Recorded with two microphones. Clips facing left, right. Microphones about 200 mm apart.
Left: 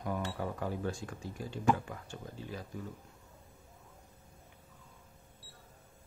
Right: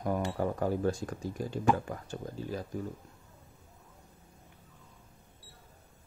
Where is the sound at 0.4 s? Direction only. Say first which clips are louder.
Right 6 dB; 45° right (ahead or behind).